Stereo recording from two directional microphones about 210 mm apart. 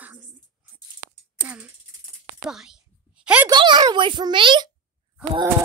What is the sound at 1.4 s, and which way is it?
Speech, 5° right (ahead or behind).